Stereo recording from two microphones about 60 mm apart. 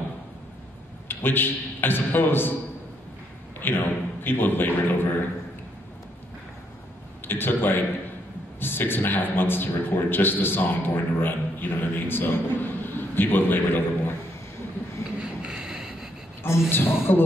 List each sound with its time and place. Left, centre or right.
1.0 s a man's voice: left
3.6 s a man's voice: left
7.2 s a man's voice: left
15.1 s a sound: centre
16.4 s a man's voice: left